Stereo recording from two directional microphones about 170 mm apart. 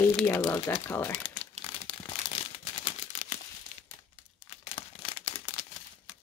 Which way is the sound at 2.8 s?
35° left (ahead or behind).